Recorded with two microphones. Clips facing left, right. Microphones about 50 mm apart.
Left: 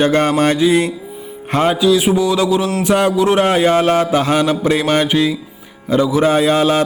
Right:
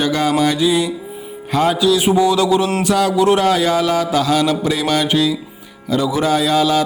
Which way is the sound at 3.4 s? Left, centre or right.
Left.